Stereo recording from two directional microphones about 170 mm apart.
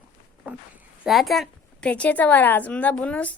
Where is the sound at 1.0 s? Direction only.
Centre (ahead or behind).